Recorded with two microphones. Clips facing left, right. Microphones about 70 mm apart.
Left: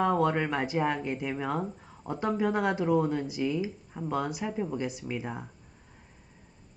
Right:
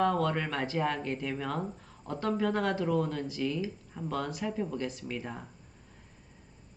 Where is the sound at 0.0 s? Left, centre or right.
Centre.